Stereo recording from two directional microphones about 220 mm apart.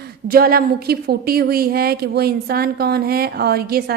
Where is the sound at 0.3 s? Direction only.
40° right (ahead or behind).